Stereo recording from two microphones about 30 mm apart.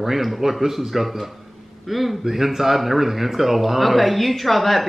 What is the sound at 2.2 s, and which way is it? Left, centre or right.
Speech, centre.